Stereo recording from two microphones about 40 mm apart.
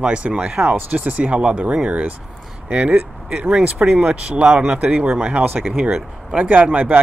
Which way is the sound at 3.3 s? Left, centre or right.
Right.